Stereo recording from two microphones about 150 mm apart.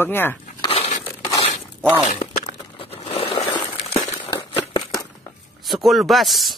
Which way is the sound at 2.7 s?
40° left (ahead or behind).